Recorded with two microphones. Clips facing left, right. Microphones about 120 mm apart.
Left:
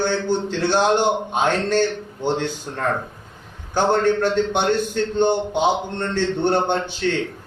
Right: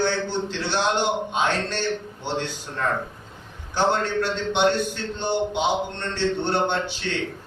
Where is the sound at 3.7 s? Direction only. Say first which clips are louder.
Left 4 dB; 50° left (ahead or behind).